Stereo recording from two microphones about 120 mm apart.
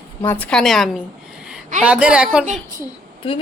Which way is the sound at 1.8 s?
10° right (ahead or behind).